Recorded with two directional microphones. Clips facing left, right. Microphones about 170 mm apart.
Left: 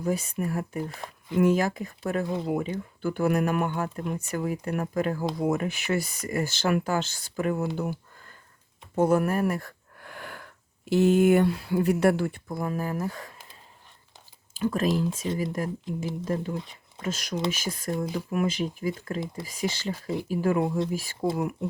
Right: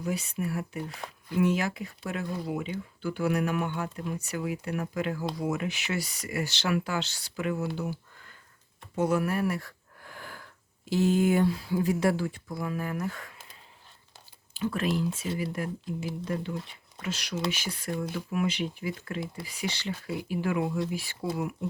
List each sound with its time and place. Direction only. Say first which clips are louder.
0.0 s speech: left 4 dB; 45° left (ahead or behind)
7.8 s a sound: left 3 dB; 50° left (ahead or behind)
9.0 s speech: left 4 dB; 50° left (ahead or behind)
14.5 s speech: left 4 dB; 45° left (ahead or behind)